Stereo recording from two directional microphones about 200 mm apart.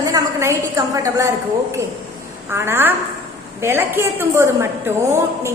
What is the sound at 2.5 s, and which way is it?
A woman's voice, 10° right (ahead or behind).